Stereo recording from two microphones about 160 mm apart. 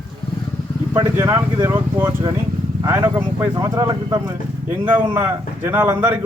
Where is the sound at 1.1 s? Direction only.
15° right (ahead or behind).